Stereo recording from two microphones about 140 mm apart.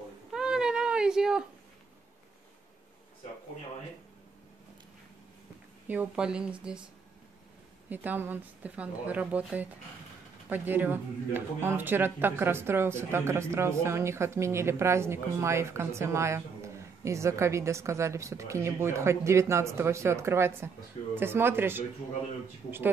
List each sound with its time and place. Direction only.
0.3 s a sound: 5° right (ahead or behind)
5.9 s speech: 10° right (ahead or behind)
7.9 s a man's voice: 15° right (ahead or behind)